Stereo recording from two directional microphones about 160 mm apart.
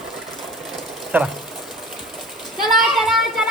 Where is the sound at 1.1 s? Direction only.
10° right (ahead or behind).